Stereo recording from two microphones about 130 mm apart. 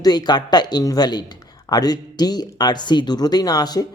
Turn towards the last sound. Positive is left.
turn(degrees=30)  # may be behind; listen again after turning